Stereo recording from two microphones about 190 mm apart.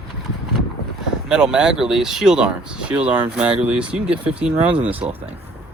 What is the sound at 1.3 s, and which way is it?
Speech, 5° right (ahead or behind).